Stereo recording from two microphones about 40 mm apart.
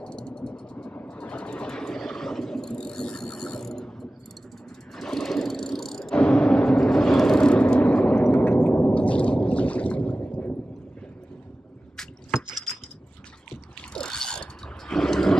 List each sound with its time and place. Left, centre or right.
0.0 s a sound: left
1.0 s vehicle: left; by 5.9 s centre
6.1 s a sound: left
6.9 s vehicle: centre; by 10.6 s left
12.0 s drip: centre
13.9 s mechanisms: centre
15.0 s roar: centre